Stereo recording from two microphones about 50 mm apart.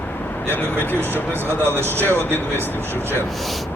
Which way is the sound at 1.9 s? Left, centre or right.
Left.